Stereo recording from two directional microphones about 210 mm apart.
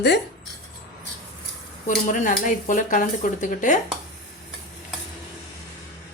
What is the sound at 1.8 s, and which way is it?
Speech, 35° left (ahead or behind).